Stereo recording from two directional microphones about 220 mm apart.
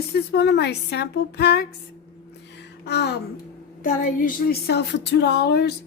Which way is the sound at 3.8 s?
40° left (ahead or behind).